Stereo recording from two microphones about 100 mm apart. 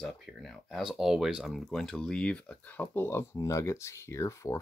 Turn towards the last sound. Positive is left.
turn(degrees=30)  # may be behind; listen again after turning